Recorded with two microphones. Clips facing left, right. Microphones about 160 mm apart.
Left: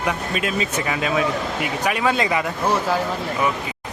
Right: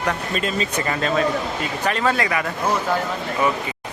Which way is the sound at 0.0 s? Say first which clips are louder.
Even; 10° left (ahead or behind).